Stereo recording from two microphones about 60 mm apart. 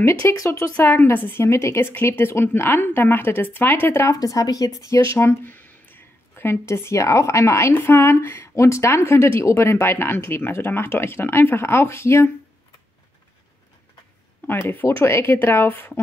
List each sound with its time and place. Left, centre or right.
0.3 s speech: left
0.7 s speech: left
1.4 s speech: left
4.2 s speech: left
7.7 s speech: left
14.6 s speech: left
14.9 s speech: left